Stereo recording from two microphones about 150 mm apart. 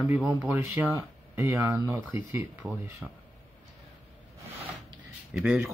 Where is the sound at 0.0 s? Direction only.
15° right (ahead or behind).